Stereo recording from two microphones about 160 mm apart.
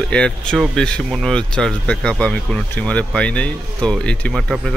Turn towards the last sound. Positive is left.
turn(degrees=5)  # may be behind; listen again after turning